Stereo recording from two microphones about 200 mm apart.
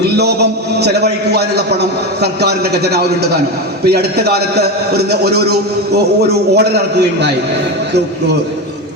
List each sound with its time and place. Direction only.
0.0 s a man's voice: 55° right (ahead or behind)